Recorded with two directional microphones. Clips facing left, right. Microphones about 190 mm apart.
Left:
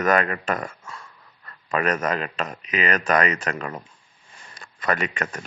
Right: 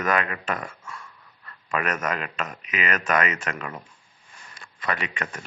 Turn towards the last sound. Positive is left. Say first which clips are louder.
# left 5 dB
turn(degrees=45)  # may be behind; listen again after turning